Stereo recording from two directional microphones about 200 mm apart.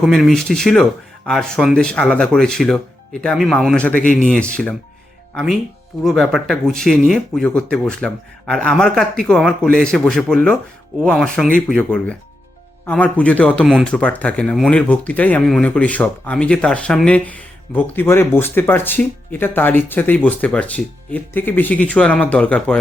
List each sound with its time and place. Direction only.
0.0 s speech: centre (ahead or behind)
4.0 s speech: 40° left (ahead or behind)
4.3 s speech: 5° left (ahead or behind)